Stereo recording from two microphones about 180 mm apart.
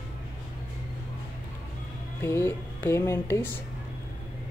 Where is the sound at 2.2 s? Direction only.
15° left (ahead or behind).